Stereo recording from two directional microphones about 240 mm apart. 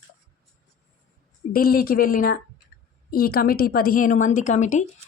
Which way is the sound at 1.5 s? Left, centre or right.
Left.